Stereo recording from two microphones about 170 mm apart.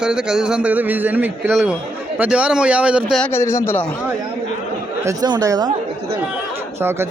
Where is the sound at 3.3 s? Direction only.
15° left (ahead or behind).